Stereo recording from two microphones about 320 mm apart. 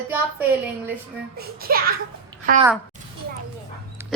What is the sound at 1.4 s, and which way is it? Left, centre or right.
Speech, right.